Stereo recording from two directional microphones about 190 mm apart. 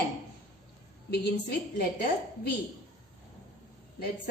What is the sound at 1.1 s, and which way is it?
Speech, 60° left (ahead or behind).